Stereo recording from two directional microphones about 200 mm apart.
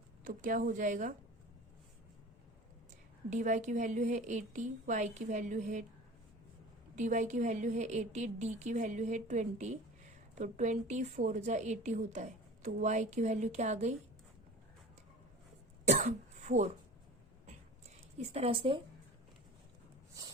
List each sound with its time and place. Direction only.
0.3 s a woman's voice: 40° right (ahead or behind)
3.2 s a woman's voice: 40° right (ahead or behind)
6.9 s a woman's voice: 40° right (ahead or behind)
15.9 s throat clearing: 35° right (ahead or behind)
18.3 s a woman's voice: 30° right (ahead or behind)